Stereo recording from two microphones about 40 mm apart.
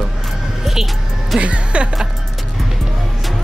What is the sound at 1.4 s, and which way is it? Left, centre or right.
Speech, right.